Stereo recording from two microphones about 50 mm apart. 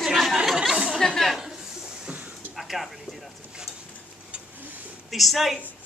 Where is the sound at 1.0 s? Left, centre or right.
Centre.